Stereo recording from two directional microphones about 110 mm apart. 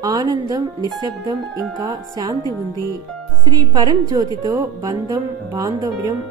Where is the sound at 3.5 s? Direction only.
40° right (ahead or behind).